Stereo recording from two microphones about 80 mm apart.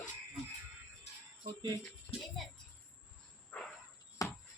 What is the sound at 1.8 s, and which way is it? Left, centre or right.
Music, centre.